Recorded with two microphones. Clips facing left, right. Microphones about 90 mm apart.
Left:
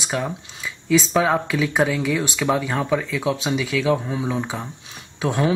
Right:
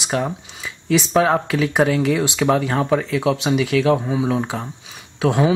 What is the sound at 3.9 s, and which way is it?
Speech, 15° right (ahead or behind).